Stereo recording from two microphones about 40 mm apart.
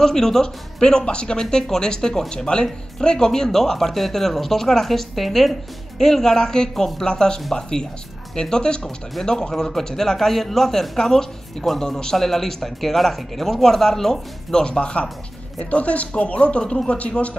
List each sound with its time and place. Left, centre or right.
0.0 s speech: centre
14.6 s speech: left